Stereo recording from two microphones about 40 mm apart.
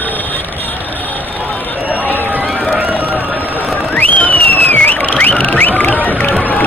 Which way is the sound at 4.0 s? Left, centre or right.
Left.